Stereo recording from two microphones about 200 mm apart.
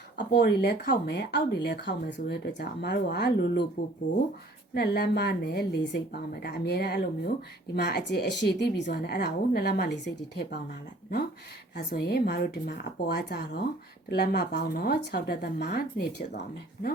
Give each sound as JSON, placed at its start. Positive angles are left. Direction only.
{"t": 0.3, "sound": "speech", "side_deg": 55}
{"t": 4.7, "sound": "speech", "side_deg": 55}
{"t": 11.9, "sound": "speech", "side_deg": 55}